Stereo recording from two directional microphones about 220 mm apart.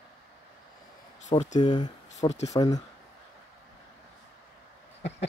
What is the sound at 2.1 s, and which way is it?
Speech, 30° left (ahead or behind).